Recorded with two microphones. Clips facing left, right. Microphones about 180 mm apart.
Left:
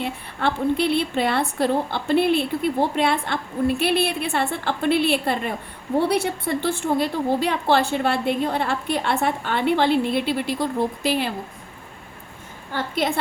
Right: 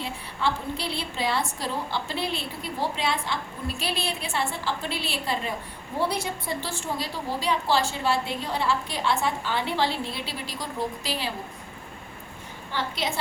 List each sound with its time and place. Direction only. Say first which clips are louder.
0.0 s a woman's voice: left 4 dB; 60° left (ahead or behind)
12.7 s a woman's voice: left 6 dB; 55° left (ahead or behind)